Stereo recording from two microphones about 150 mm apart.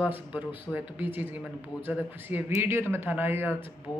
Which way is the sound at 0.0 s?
10° right (ahead or behind).